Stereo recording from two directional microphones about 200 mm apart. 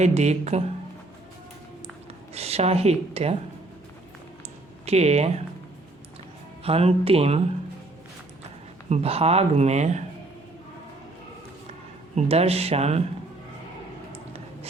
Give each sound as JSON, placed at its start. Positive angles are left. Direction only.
{"t": 0.0, "sound": "speech", "side_deg": -35}
{"t": 2.3, "sound": "speech", "side_deg": -30}
{"t": 4.9, "sound": "speech", "side_deg": -30}
{"t": 6.7, "sound": "speech", "side_deg": -30}
{"t": 8.9, "sound": "speech", "side_deg": -30}
{"t": 12.1, "sound": "speech", "side_deg": -30}
{"t": 14.1, "sound": "a sound", "side_deg": -30}